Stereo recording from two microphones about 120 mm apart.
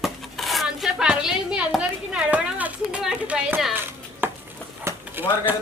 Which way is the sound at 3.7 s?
20° right (ahead or behind).